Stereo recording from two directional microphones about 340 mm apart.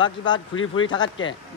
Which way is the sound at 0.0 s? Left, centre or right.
Centre.